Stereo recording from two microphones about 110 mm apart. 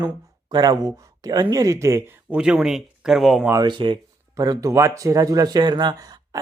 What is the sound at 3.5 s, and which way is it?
Speech, 45° right (ahead or behind).